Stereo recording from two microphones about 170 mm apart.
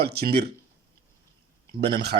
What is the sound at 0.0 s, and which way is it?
Speech, 70° right (ahead or behind).